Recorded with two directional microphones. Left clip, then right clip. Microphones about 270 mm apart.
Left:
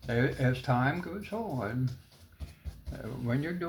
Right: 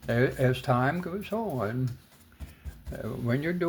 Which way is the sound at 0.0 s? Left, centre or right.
Right.